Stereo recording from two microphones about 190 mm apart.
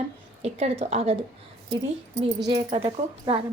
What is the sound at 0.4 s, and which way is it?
Speech, 30° right (ahead or behind).